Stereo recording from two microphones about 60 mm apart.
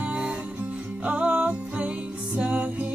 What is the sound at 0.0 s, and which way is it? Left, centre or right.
Music, centre.